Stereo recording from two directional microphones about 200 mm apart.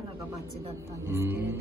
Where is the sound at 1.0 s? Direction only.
10° right (ahead or behind).